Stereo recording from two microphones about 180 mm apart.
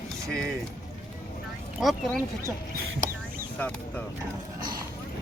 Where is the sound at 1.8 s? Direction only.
Centre (ahead or behind).